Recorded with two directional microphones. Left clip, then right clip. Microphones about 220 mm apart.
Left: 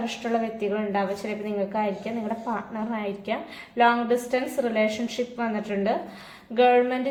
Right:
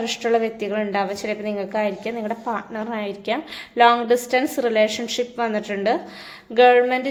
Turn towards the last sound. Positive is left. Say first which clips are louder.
# right 5 dB
turn(degrees=-50)  # may be behind; listen again after turning